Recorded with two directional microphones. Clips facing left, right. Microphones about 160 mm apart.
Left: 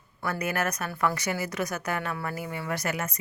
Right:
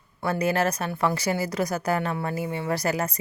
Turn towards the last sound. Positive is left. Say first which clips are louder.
# right 5 dB
turn(degrees=-35)  # may be behind; listen again after turning